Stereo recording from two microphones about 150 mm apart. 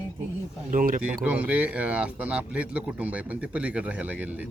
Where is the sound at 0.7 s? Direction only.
65° right (ahead or behind).